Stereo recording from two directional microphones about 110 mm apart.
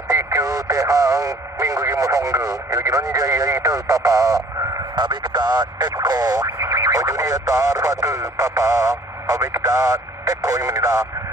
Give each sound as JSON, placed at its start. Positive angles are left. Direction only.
{"t": 0.1, "sound": "speech", "side_deg": -30}